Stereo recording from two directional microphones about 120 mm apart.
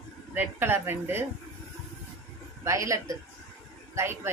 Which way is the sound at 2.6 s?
25° right (ahead or behind).